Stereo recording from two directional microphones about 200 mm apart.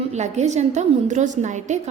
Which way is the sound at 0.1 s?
35° right (ahead or behind).